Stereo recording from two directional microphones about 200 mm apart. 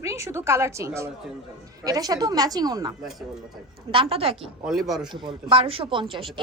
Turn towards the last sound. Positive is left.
turn(degrees=-25)  # may be behind; listen again after turning